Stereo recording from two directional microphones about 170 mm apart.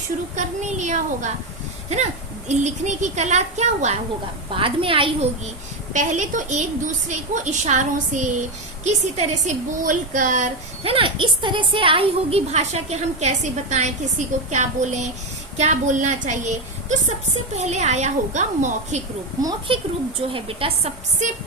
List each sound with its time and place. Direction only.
0.3 s a woman's voice: 45° right (ahead or behind)
4.5 s a woman's voice: 30° right (ahead or behind)
5.9 s a woman's voice: 45° right (ahead or behind)
10.9 s a woman's voice: 30° right (ahead or behind)
19.4 s a child's voice: 25° right (ahead or behind)